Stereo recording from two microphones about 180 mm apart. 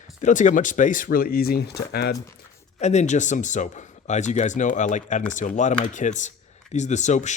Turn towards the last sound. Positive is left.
turn(degrees=40)  # may be behind; listen again after turning